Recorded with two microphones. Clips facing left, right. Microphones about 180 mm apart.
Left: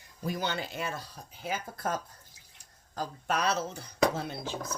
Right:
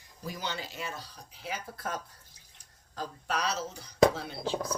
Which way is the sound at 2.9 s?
50° left (ahead or behind).